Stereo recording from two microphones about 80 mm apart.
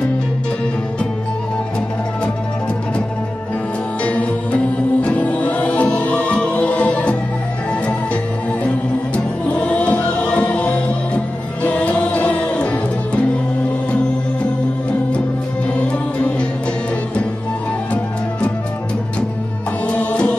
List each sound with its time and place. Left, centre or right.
4.0 s music: centre
8.6 s music: centre
19.9 s music: centre